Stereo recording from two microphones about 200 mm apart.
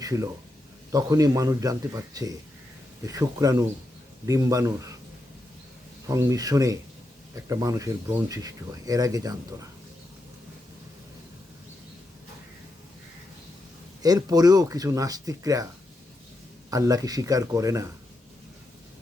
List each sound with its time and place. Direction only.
0.0 s speech: 15° right (ahead or behind)
6.1 s speech: 15° right (ahead or behind)
14.0 s speech: 20° right (ahead or behind)
16.6 s speech: 15° right (ahead or behind)